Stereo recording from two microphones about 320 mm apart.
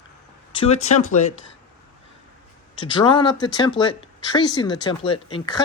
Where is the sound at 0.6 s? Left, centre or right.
Centre.